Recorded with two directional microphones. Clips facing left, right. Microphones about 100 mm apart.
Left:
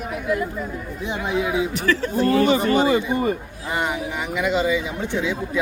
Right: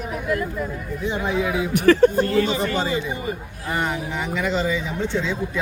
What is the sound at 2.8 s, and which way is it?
Speech, 50° left (ahead or behind).